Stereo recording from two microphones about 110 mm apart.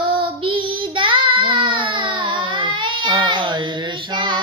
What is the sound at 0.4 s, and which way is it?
Child singing, 50° right (ahead or behind).